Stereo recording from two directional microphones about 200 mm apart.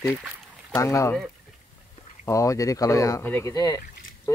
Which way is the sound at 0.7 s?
15° left (ahead or behind).